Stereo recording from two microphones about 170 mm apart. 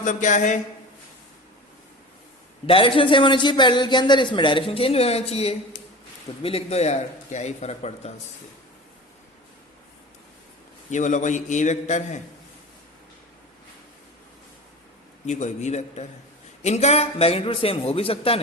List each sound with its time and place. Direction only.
0.0 s a man's voice: 50° left (ahead or behind)
2.6 s a man's voice: 30° left (ahead or behind)
10.9 s a man's voice: 45° left (ahead or behind)
15.3 s a man's voice: 45° left (ahead or behind)